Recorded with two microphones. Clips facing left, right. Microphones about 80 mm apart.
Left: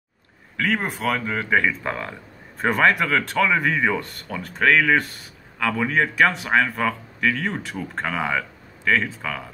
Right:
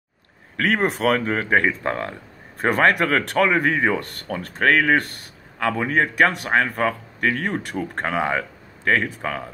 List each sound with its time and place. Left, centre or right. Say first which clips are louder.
0.6 s speech: right 4 dB; right
2.6 s speech: right 1 dB; right
5.6 s a man's voice: right 1 dB; right
6.1 s speech: even; right
6.5 s speech: even; right